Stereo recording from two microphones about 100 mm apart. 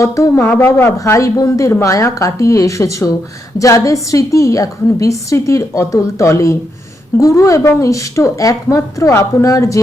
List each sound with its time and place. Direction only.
0.0 s a woman's voice: 30° left (ahead or behind)